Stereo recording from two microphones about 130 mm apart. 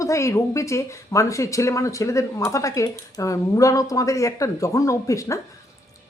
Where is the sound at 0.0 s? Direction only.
25° left (ahead or behind).